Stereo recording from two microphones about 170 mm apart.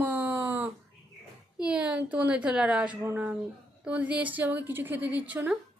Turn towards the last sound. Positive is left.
turn(degrees=-10)  # may be behind; listen again after turning